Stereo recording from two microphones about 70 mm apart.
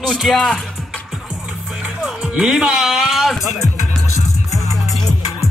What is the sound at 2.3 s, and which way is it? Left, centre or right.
Speech, centre.